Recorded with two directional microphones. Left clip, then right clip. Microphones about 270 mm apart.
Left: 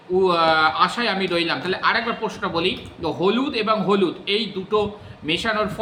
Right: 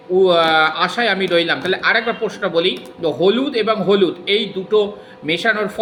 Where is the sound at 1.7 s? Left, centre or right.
Left.